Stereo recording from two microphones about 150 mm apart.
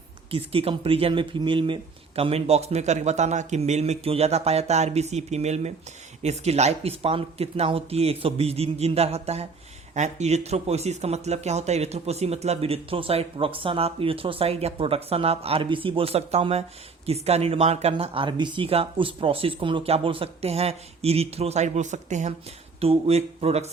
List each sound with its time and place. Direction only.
0.3 s speech: 40° right (ahead or behind)
22.8 s speech: 40° right (ahead or behind)